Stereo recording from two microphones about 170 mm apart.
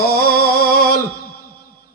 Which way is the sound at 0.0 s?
60° left (ahead or behind).